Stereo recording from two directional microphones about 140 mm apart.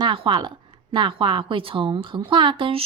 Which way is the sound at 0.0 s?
35° right (ahead or behind).